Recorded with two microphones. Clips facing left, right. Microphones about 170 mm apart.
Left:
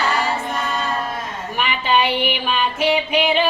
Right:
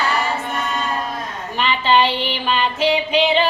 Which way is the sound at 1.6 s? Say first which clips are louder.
Right 3 dB; 10° left (ahead or behind).